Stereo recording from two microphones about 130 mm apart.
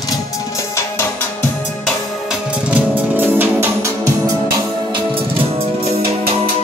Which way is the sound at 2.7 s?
15° right (ahead or behind).